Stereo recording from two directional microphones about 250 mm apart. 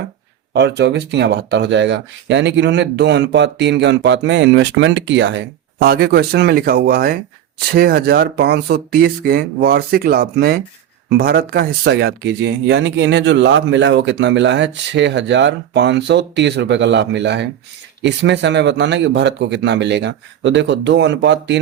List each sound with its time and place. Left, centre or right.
0.5 s speech: right